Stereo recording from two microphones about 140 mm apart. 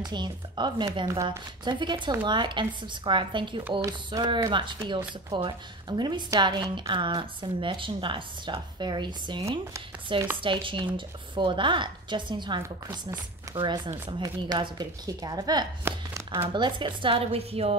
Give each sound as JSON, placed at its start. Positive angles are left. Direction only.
{"t": 0.0, "sound": "speech", "side_deg": -30}
{"t": 1.0, "sound": "a woman's voice", "side_deg": -25}
{"t": 15.8, "sound": "speech", "side_deg": -15}
{"t": 16.5, "sound": "speech", "side_deg": -35}